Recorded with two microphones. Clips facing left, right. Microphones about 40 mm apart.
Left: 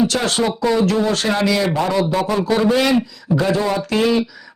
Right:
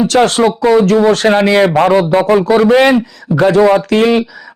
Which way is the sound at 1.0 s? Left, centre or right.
Right.